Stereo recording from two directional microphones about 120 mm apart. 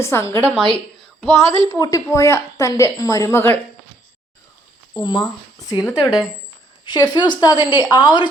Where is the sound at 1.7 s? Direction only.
30° left (ahead or behind).